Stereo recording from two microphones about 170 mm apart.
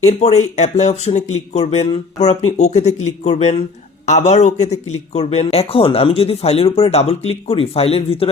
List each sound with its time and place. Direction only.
0.1 s speech: 40° left (ahead or behind)